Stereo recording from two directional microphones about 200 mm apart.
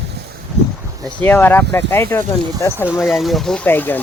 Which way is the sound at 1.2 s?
10° left (ahead or behind).